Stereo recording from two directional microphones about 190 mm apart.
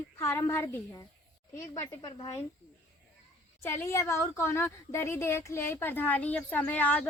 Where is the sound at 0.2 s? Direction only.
15° left (ahead or behind).